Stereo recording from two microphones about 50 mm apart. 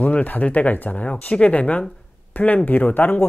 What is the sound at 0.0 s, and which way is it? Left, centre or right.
Speech, left.